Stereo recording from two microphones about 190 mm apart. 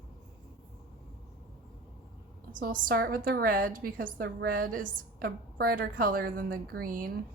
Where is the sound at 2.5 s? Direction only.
50° right (ahead or behind).